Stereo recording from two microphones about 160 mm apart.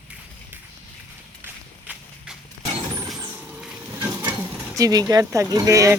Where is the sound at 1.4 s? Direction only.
10° right (ahead or behind).